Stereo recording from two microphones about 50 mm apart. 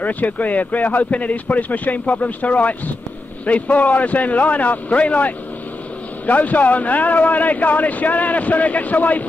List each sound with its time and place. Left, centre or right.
0.0 s a man's voice: left